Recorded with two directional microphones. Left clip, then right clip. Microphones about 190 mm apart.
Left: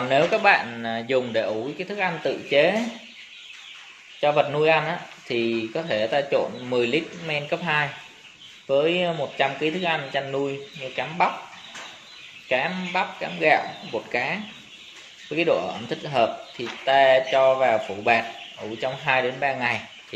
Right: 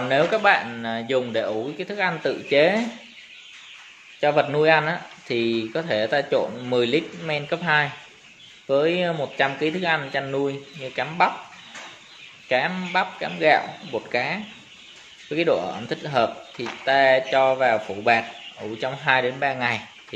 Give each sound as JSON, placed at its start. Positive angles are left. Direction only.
{"t": 0.1, "sound": "speech", "side_deg": -10}
{"t": 4.2, "sound": "speech", "side_deg": -30}
{"t": 12.4, "sound": "speech", "side_deg": -25}